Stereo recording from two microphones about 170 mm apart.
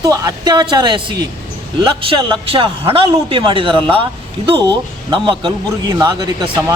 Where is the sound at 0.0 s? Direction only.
20° right (ahead or behind).